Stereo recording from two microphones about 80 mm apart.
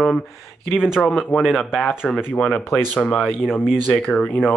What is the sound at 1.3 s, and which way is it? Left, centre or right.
Speech, centre.